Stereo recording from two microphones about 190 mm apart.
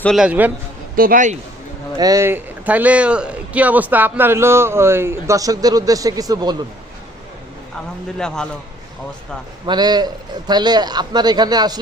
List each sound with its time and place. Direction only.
0.0 s a man's voice: centre (ahead or behind)
0.9 s speech: 45° right (ahead or behind)
2.0 s speech: 20° right (ahead or behind)
9.6 s a man's voice: 20° right (ahead or behind)